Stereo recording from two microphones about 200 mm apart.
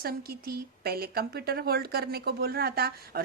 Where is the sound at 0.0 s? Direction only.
50° right (ahead or behind).